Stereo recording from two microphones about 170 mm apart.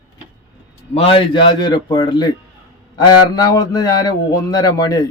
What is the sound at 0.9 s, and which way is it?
A man's voice, 35° left (ahead or behind).